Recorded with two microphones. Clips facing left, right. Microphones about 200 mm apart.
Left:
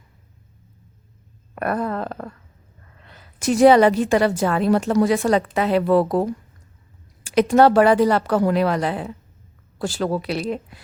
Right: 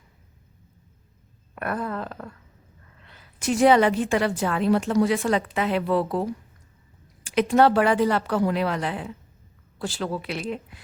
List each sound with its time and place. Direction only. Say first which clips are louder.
1.5 s a woman's voice: left 5 dB; 40° left (ahead or behind)
2.0 s a sound: left 6 dB; 65° left (ahead or behind)
3.1 s a woman's voice: left 4 dB; 40° left (ahead or behind)
7.3 s a woman's voice: left 4 dB; 40° left (ahead or behind)